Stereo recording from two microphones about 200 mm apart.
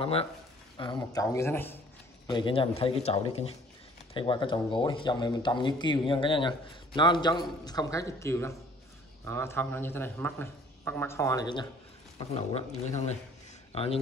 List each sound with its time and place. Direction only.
0.0 s a man's voice: 30° left (ahead or behind); by 1.8 s 10° left (ahead or behind)
2.2 s a man's voice: 25° left (ahead or behind)
12.2 s speech: 30° left (ahead or behind)